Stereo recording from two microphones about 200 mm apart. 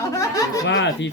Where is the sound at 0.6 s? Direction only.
60° left (ahead or behind).